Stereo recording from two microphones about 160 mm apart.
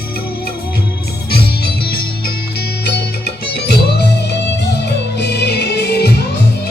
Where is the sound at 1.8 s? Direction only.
70° left (ahead or behind).